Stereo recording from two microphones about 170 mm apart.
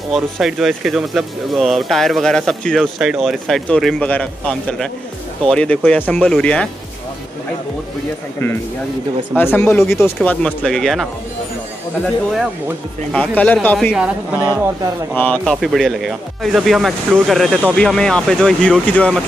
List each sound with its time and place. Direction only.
0.1 s speech: centre (ahead or behind)
9.3 s speech: 10° left (ahead or behind)
13.1 s speech: 5° left (ahead or behind)
13.9 s a woman's voice: 5° right (ahead or behind)
15.1 s speech: 10° left (ahead or behind)